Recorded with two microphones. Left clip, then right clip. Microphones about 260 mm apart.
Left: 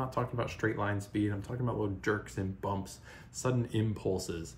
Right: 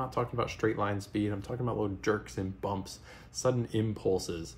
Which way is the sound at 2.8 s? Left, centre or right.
Right.